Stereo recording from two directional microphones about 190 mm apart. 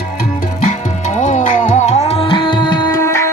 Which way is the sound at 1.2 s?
40° left (ahead or behind).